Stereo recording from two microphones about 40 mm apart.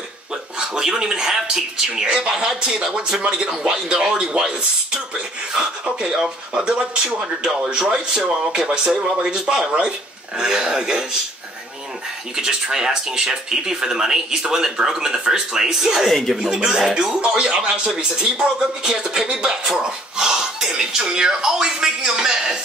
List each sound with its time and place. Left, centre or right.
0.6 s speech: centre
1.9 s speech: right
12.4 s speech: centre
16.1 s speech: centre
16.3 s speech: right